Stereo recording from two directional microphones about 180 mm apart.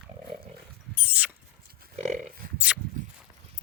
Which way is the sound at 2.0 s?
45° right (ahead or behind).